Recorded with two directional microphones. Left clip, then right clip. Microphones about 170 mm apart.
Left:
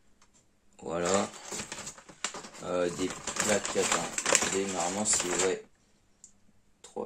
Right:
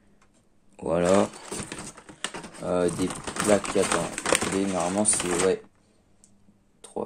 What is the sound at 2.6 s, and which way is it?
Speech, 50° right (ahead or behind).